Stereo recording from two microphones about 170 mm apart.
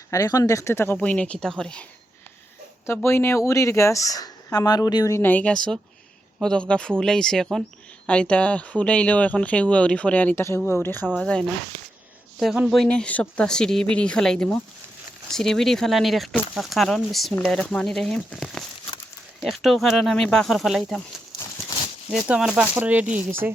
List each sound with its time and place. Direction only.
0.1 s speech: 20° left (ahead or behind); by 21.0 s centre (ahead or behind)
22.1 s speech: 5° right (ahead or behind)